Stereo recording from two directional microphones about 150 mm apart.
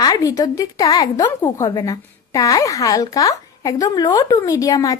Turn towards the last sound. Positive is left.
turn(degrees=25)  # may be behind; listen again after turning